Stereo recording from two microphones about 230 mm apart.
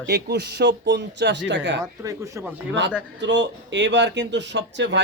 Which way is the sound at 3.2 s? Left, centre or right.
Right.